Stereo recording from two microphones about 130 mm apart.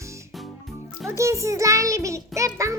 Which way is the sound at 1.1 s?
20° right (ahead or behind).